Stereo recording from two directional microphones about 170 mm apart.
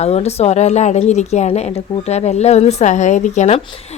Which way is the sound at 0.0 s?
40° left (ahead or behind).